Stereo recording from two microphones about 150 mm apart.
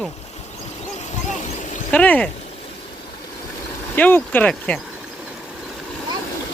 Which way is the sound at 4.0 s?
10° left (ahead or behind).